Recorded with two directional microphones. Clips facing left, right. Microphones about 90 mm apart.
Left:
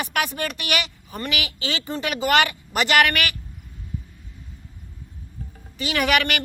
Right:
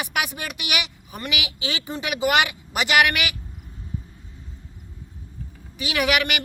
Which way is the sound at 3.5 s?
25° right (ahead or behind).